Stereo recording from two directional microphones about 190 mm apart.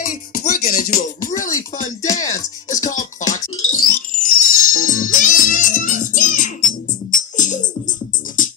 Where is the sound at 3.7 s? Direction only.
45° left (ahead or behind).